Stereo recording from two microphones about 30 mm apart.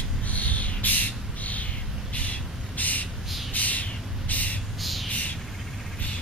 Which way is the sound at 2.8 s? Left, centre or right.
Left.